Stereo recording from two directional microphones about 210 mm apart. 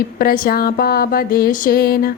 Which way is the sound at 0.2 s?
45° left (ahead or behind).